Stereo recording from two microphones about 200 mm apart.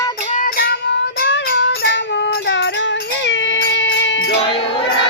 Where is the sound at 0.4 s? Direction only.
50° left (ahead or behind).